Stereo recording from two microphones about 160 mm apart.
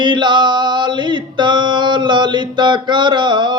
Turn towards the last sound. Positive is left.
turn(degrees=-30)  # may be behind; listen again after turning